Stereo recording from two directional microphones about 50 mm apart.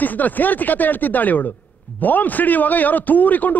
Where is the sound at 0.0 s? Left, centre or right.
Left.